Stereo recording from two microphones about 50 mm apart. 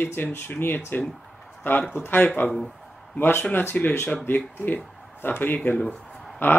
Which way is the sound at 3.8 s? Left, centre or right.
Left.